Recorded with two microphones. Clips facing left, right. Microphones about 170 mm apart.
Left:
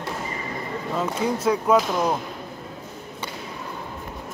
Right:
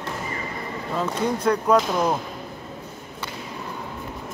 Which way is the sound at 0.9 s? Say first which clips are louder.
Even; 5° left (ahead or behind).